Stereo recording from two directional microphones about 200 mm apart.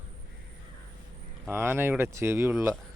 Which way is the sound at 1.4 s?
10° right (ahead or behind).